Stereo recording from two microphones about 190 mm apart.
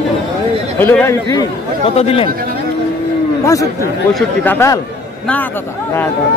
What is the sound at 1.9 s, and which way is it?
Speech, 30° left (ahead or behind).